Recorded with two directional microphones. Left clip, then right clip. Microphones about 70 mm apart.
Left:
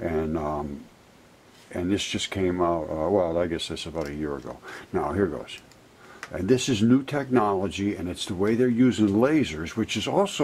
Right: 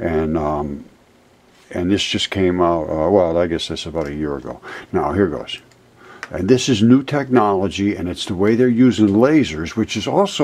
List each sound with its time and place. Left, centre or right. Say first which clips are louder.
0.0 s speech: right 8 dB; centre
1.7 s speech: right 8 dB; centre
3.8 s speech: right 8 dB; centre
4.1 s speech: right 7 dB; centre
4.4 s speech: right 8 dB; centre
4.7 s speech: right 8 dB; centre
5.1 s speech: right 8 dB; right
6.5 s speech: right 8 dB; centre
9.0 s speech: right 9 dB; centre